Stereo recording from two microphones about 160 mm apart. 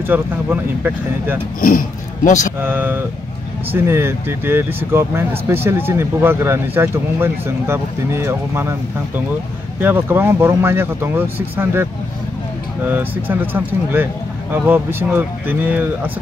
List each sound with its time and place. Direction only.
0.0 s speech: 10° right (ahead or behind)
1.6 s speech: 60° left (ahead or behind)
2.6 s speech: 10° right (ahead or behind)
9.8 s speech: 10° right (ahead or behind)